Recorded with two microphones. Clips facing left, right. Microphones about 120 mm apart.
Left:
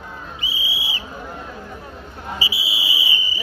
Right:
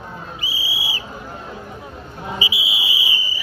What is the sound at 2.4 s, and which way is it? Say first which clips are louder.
Fire alarm: right 2 dB; 30° left (ahead or behind).